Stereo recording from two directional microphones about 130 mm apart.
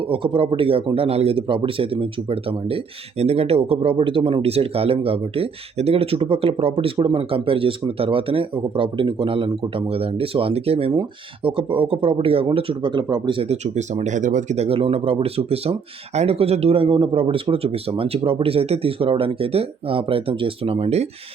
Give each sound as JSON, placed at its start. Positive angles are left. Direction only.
{"t": 0.1, "sound": "speech", "side_deg": -45}
{"t": 13.7, "sound": "speech", "side_deg": -65}